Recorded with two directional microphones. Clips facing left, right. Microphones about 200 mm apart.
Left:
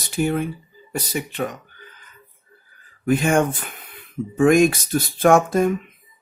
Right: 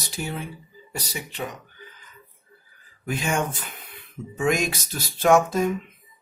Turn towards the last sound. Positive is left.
turn(degrees=55)  # may be behind; listen again after turning